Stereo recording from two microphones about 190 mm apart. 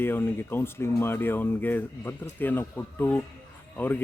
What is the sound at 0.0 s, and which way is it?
Speech, 10° left (ahead or behind).